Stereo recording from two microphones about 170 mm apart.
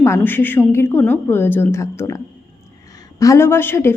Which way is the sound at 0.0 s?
15° left (ahead or behind).